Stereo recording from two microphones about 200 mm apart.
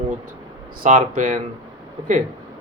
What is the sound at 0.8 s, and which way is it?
Speech, 40° right (ahead or behind).